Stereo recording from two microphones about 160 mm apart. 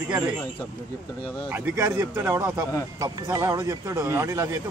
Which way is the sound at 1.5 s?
15° right (ahead or behind).